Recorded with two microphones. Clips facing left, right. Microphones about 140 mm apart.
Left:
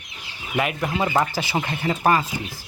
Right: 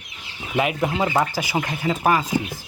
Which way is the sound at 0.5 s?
15° right (ahead or behind).